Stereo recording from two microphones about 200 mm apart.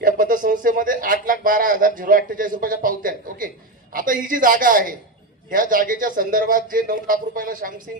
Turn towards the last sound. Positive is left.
turn(degrees=-45)  # may be behind; listen again after turning